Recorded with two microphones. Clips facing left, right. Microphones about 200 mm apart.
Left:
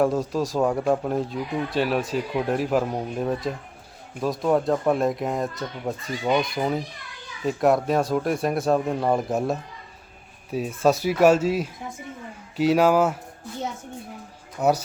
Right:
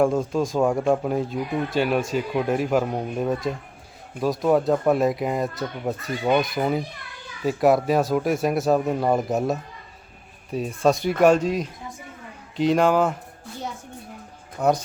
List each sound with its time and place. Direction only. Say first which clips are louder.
0.0 s speech: right 1 dB; centre (ahead or behind)
14.6 s speech: even; 5° left (ahead or behind)